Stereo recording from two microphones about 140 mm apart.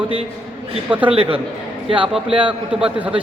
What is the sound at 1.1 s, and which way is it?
A man's voice, 40° right (ahead or behind).